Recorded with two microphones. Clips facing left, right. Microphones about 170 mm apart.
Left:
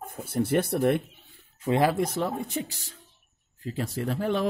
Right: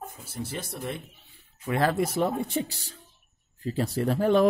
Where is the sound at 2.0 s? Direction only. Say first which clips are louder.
Right 2 dB; 10° right (ahead or behind).